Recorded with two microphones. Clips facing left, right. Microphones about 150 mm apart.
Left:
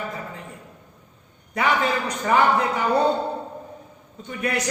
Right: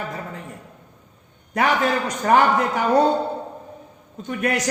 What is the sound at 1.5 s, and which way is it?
A man's voice, 45° right (ahead or behind).